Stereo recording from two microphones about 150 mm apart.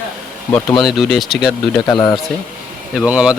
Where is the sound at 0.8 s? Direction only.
Centre (ahead or behind).